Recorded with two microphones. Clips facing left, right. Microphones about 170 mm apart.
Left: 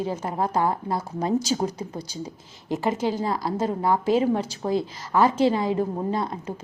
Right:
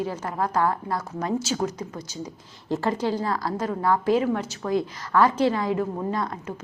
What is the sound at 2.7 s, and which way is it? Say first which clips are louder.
A woman's voice: even; 20° left (ahead or behind).